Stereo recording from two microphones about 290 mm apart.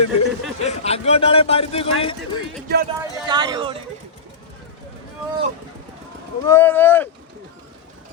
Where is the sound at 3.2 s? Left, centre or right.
Centre.